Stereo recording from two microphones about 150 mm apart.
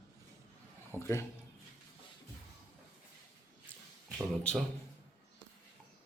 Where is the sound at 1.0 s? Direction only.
15° left (ahead or behind).